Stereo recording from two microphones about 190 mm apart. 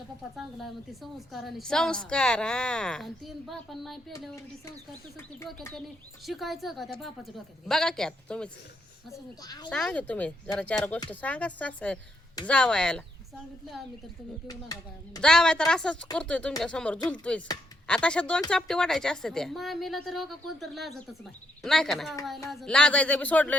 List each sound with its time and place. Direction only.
0.3 s a woman's voice: centre (ahead or behind)
5.7 s a woman's voice: centre (ahead or behind)
9.4 s speech: 20° left (ahead or behind)
9.6 s a woman's voice: 5° left (ahead or behind)
14.4 s speech: 20° left (ahead or behind)
15.2 s a woman's voice: 5° left (ahead or behind)